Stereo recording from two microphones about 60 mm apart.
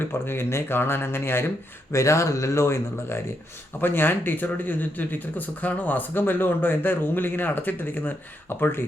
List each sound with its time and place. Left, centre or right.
0.0 s a man's voice: left
1.9 s speech: left
3.8 s a man's voice: left